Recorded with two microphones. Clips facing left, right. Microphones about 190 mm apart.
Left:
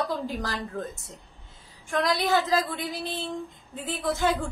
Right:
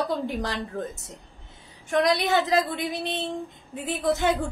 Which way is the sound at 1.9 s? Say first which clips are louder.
Right 2 dB; 20° right (ahead or behind).